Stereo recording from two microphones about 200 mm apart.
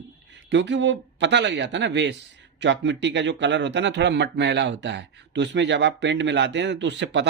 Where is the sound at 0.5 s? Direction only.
65° right (ahead or behind).